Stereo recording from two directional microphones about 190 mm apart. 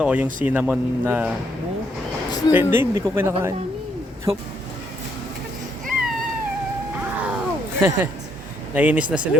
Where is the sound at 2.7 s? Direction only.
15° right (ahead or behind).